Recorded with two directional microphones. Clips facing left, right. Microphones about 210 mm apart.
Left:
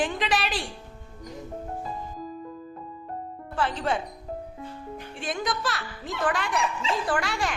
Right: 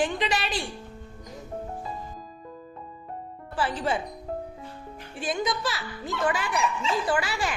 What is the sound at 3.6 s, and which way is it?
Speech, 5° right (ahead or behind).